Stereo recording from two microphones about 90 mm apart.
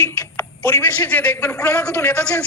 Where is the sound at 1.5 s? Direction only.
35° left (ahead or behind).